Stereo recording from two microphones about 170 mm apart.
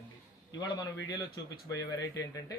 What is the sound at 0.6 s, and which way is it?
Speech, 20° left (ahead or behind).